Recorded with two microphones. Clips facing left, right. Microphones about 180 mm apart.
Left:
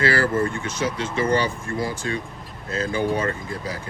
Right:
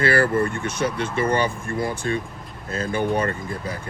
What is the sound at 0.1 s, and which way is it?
Speech, 55° right (ahead or behind).